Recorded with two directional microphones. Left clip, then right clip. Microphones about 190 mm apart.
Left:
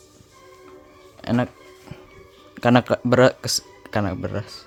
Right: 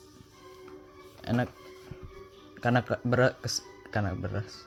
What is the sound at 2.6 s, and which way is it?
Speech, 35° left (ahead or behind).